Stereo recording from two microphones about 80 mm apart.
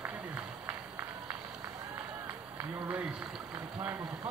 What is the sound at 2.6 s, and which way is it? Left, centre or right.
Speech, right.